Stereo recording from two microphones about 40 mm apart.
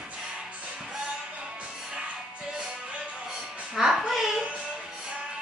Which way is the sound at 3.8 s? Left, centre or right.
Centre.